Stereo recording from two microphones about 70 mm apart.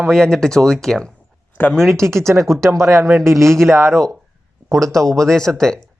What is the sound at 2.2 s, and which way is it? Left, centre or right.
Speech, right.